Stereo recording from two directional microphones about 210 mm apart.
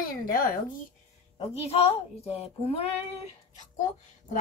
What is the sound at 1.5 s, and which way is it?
Speech, 30° left (ahead or behind).